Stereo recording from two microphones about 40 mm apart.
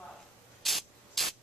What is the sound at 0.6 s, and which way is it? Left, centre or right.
Spray, centre.